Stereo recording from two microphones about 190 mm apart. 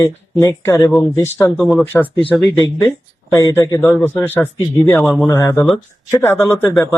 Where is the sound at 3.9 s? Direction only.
5° left (ahead or behind).